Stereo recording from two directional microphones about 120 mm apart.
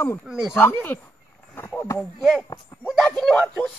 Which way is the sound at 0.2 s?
5° right (ahead or behind).